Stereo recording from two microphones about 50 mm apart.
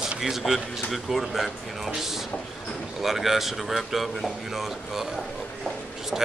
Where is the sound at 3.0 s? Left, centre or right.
Centre.